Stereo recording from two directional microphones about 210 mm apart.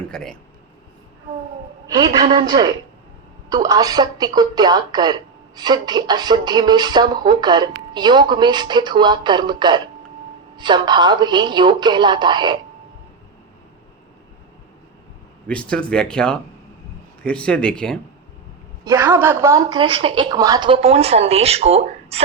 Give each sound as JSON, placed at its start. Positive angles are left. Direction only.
{"t": 0.1, "sound": "speech", "side_deg": 5}
{"t": 2.3, "sound": "a woman's voice", "side_deg": -20}
{"t": 15.4, "sound": "speech", "side_deg": 5}
{"t": 18.9, "sound": "a woman's voice", "side_deg": -15}